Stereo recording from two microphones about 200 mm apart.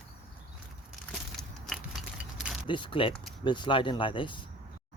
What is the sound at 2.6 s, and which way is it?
Speech, 25° left (ahead or behind).